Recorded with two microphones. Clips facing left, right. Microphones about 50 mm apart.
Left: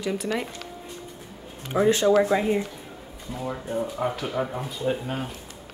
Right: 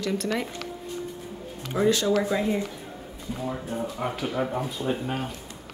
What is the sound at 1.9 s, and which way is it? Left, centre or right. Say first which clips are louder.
Speech: left 4 dB; left.